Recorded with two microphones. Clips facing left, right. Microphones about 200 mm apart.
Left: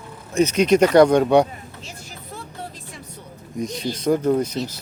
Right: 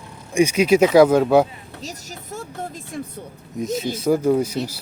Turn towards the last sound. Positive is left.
turn(degrees=-10)  # may be behind; listen again after turning